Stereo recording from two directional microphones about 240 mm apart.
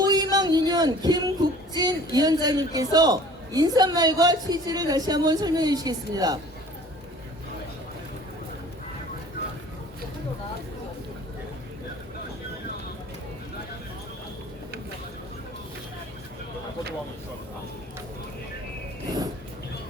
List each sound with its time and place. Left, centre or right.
0.0 s music: centre
1.7 s a man's voice: centre